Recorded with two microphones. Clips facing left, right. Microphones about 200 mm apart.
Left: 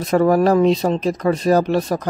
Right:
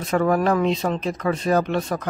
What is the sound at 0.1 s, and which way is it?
Speech, 35° left (ahead or behind).